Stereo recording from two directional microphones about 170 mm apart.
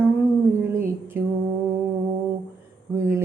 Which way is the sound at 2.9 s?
15° right (ahead or behind).